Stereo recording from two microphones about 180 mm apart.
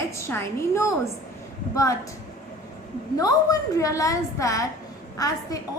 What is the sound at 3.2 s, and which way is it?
A woman's voice, 20° left (ahead or behind).